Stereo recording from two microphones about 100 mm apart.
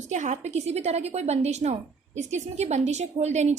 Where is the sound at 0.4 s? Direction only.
90° right.